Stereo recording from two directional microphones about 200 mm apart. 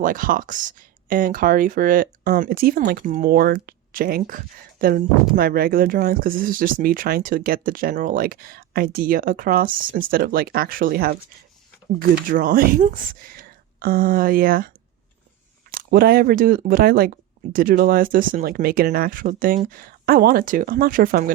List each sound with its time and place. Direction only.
0.0 s speech: 45° right (ahead or behind)
12.3 s speech: 45° right (ahead or behind)
15.7 s speech: 45° right (ahead or behind)